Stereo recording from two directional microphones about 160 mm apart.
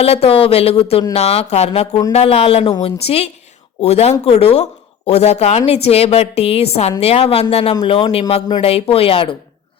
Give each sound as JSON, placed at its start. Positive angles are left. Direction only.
{"t": 0.0, "sound": "speech", "side_deg": 40}